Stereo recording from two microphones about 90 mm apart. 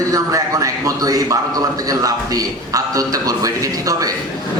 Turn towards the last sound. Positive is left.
turn(degrees=-40)  # may be behind; listen again after turning